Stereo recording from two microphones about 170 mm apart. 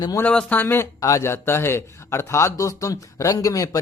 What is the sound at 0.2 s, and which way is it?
Speech, 5° left (ahead or behind).